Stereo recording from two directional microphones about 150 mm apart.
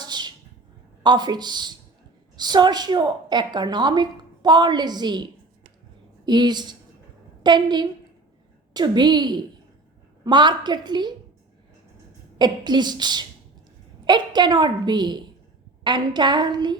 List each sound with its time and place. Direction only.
0.0 s a sound: 30° right (ahead or behind)
1.0 s a woman's voice: 30° right (ahead or behind)
12.4 s a woman's voice: 30° right (ahead or behind)